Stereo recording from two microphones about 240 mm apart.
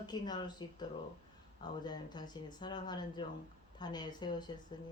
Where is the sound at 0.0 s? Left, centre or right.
Centre.